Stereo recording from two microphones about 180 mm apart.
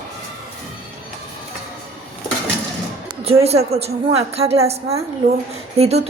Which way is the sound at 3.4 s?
35° right (ahead or behind).